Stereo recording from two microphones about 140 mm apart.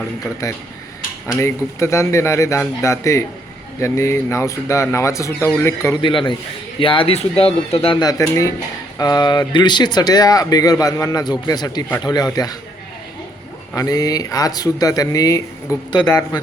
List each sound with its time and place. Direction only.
0.4 s speech: 20° left (ahead or behind)
6.0 s speech: 35° left (ahead or behind)
8.0 s speech: 20° left (ahead or behind)
13.7 s speech: 25° left (ahead or behind)